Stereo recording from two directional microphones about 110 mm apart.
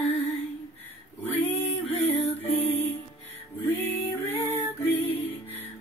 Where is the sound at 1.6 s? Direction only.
65° left (ahead or behind).